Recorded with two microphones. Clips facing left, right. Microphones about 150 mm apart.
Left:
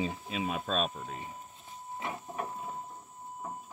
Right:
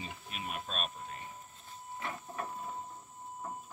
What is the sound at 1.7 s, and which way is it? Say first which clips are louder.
Train: left 3 dB; 20° left (ahead or behind).